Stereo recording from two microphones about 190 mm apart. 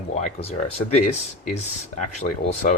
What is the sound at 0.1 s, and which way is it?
Speech, 35° left (ahead or behind).